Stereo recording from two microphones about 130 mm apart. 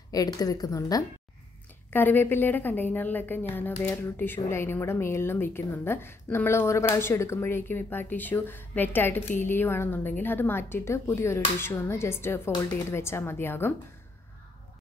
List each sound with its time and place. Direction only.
0.1 s speech: 30° left (ahead or behind)
1.9 s a woman's voice: 15° left (ahead or behind)